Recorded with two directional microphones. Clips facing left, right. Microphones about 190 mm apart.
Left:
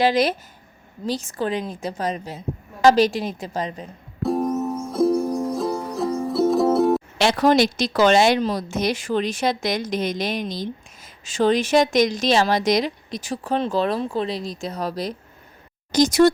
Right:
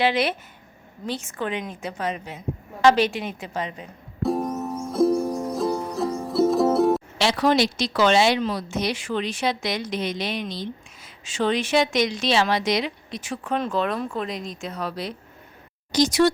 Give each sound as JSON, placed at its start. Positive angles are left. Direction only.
{"t": 0.0, "sound": "a woman's voice", "side_deg": 40}
{"t": 4.2, "sound": "music", "side_deg": 0}
{"t": 7.2, "sound": "a woman's voice", "side_deg": 50}